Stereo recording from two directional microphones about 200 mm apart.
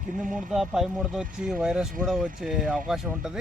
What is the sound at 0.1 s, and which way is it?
Speech, 40° right (ahead or behind).